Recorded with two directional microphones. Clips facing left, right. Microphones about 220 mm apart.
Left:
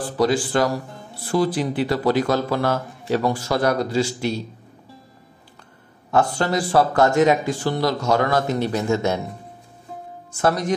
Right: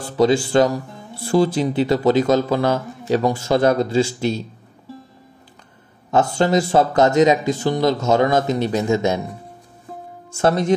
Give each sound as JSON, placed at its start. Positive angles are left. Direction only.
{"t": 0.2, "sound": "speech", "side_deg": -25}
{"t": 6.1, "sound": "speech", "side_deg": -20}
{"t": 10.3, "sound": "speech", "side_deg": -25}